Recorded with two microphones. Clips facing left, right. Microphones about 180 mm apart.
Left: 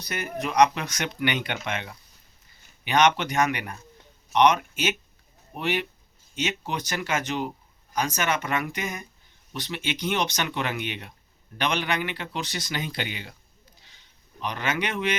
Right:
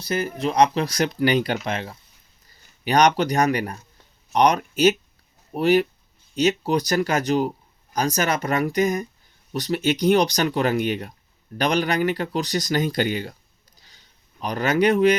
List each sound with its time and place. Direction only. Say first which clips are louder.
0.0 s speech: right 7 dB; 30° right (ahead or behind)
14.4 s speech: right 9 dB; 40° right (ahead or behind)